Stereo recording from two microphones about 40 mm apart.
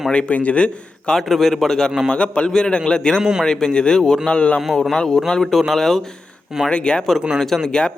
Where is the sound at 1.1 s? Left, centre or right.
Centre.